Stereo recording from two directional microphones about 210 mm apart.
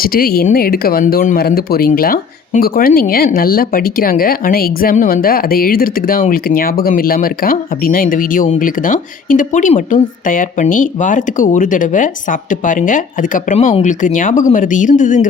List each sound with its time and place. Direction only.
0.0 s speech: 45° left (ahead or behind)